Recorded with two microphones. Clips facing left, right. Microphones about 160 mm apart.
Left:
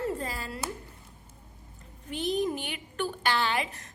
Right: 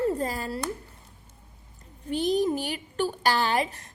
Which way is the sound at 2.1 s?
35° right (ahead or behind).